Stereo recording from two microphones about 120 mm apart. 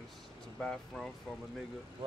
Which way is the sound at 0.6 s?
5° left (ahead or behind).